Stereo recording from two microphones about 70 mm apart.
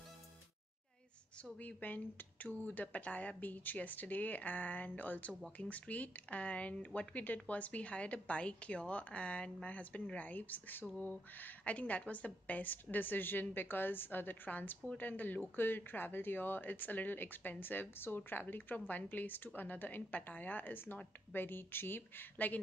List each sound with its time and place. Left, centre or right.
1.6 s speech: left